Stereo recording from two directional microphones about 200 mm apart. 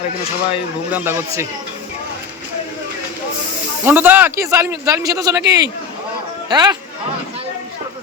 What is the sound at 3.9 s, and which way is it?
Speech, 10° right (ahead or behind).